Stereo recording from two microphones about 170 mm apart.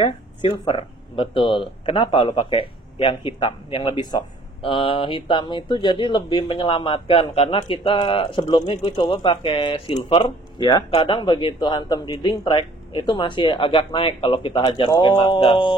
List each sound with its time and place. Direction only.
0.0 s speech: 30° left (ahead or behind)